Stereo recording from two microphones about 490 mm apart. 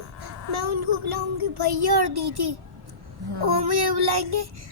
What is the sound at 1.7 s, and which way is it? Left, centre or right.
A child's voice, right.